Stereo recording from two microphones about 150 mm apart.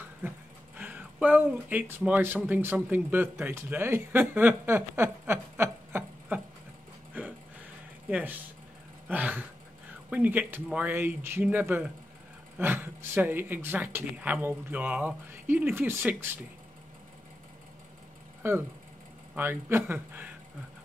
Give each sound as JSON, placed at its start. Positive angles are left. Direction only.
{"t": 0.7, "sound": "speech", "side_deg": -10}
{"t": 8.1, "sound": "speech", "side_deg": -10}
{"t": 18.4, "sound": "vehicle", "side_deg": -15}
{"t": 19.3, "sound": "speech", "side_deg": -15}